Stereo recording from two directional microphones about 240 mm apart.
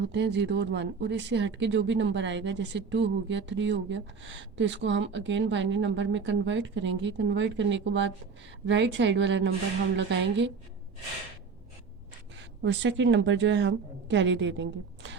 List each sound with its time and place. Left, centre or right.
0.1 s speech: right
12.4 s speech: right